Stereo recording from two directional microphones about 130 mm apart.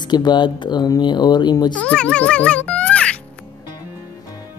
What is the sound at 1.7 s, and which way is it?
A child's voice, 10° left (ahead or behind).